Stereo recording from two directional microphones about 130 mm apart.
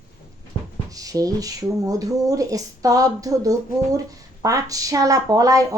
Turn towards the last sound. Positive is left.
turn(degrees=-25)  # may be behind; listen again after turning